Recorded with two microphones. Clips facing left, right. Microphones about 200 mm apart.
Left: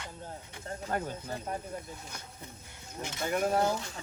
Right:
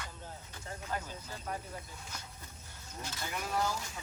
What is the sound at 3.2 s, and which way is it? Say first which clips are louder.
Speech: left 8 dB; 50° left (ahead or behind).